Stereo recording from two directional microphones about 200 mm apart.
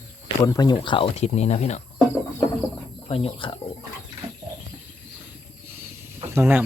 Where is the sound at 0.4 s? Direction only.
20° left (ahead or behind).